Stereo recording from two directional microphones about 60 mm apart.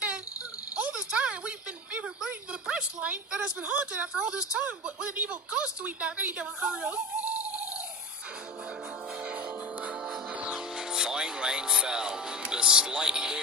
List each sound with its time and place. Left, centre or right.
0.8 s a sound: centre
3.0 s a woman's voice: right
6.6 s speech: centre
7.3 s owl: right
10.4 s music: centre